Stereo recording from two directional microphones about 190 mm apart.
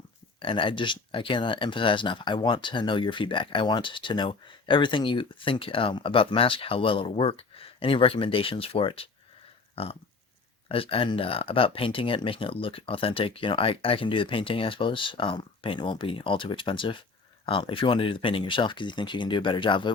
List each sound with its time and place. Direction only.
0.4 s speech: 25° left (ahead or behind)
9.7 s a sound: 30° left (ahead or behind)
10.7 s speech: 30° left (ahead or behind)